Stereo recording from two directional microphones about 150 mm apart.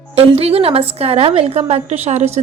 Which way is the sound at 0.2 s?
40° right (ahead or behind).